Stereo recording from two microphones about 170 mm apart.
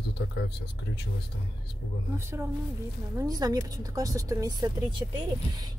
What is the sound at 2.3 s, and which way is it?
Speech, 10° right (ahead or behind).